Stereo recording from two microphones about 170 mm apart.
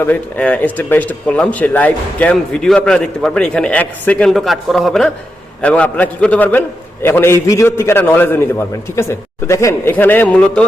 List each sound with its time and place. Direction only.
0.0 s speech: 10° left (ahead or behind)